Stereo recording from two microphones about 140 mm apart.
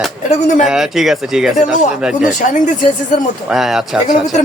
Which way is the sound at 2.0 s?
5° right (ahead or behind).